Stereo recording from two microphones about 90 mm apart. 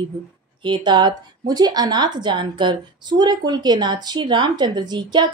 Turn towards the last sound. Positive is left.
turn(degrees=-55)  # may be behind; listen again after turning